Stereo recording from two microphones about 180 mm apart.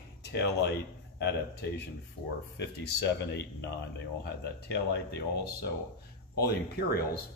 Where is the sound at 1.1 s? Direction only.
70° left (ahead or behind).